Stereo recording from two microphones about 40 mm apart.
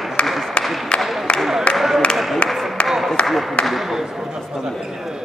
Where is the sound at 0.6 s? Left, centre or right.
Left.